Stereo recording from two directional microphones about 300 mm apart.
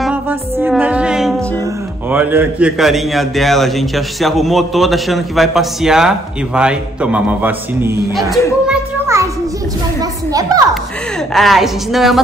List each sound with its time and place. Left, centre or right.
0.0 s music: centre
2.0 s a man's voice: centre
11.3 s a man's voice: centre